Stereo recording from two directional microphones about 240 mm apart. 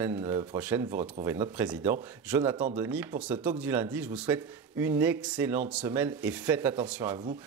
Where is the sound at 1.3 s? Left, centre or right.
Centre.